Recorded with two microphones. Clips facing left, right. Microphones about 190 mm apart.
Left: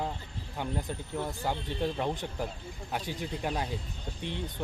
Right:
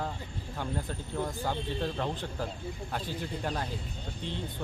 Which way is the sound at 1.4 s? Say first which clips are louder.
Left 1 dB; 15° left (ahead or behind).